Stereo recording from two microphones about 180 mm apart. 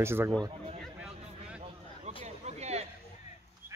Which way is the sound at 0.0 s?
15° right (ahead or behind).